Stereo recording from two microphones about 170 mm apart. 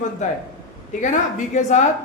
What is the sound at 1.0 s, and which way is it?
Speech, 45° left (ahead or behind).